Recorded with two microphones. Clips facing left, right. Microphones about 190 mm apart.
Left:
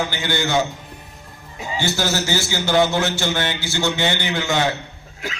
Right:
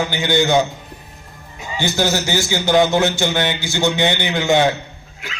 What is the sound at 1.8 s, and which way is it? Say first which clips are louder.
A man's voice: right 3 dB; 15° right (ahead or behind).